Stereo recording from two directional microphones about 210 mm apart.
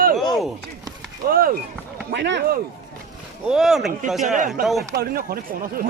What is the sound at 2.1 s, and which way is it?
Speech, 55° right (ahead or behind).